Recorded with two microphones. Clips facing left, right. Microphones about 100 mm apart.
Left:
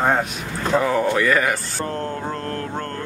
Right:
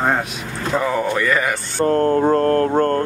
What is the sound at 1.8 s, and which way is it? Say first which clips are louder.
Mantra: right 13 dB; 50° right (ahead or behind).